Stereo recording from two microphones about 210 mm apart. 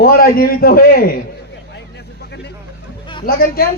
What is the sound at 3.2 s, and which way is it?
Speech, 45° left (ahead or behind).